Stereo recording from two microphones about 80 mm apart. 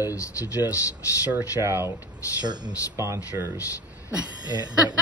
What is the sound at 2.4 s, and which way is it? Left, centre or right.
Speech, right.